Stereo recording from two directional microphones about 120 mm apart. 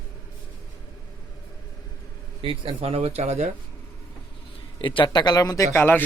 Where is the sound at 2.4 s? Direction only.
50° right (ahead or behind); by 3.5 s 70° right (ahead or behind).